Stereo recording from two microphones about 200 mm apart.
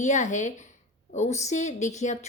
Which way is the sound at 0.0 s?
35° left (ahead or behind).